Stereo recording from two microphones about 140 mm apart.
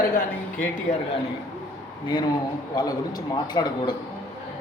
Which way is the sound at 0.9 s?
65° left (ahead or behind).